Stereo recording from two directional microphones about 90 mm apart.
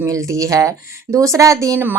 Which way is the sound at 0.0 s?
35° right (ahead or behind).